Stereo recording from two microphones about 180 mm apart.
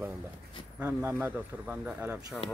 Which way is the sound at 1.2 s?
10° right (ahead or behind).